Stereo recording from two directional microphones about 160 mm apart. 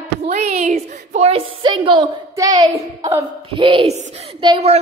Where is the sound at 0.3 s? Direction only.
45° right (ahead or behind); by 2.8 s 20° right (ahead or behind).